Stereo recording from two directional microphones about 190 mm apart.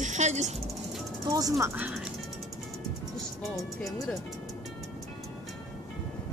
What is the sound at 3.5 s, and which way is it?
Speech, centre (ahead or behind).